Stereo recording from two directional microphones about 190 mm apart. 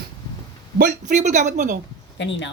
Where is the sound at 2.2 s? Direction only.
75° left (ahead or behind).